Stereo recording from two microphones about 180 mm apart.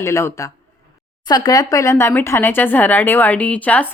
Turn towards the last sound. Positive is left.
turn(degrees=10)  # may be behind; listen again after turning